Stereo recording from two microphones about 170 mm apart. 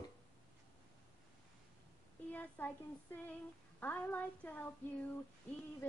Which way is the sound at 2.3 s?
10° left (ahead or behind).